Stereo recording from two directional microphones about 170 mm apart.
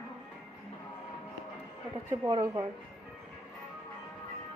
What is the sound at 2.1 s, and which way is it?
Speech, 25° right (ahead or behind).